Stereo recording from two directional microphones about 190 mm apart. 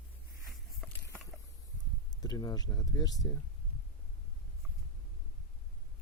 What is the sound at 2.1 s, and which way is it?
Speech, 20° left (ahead or behind).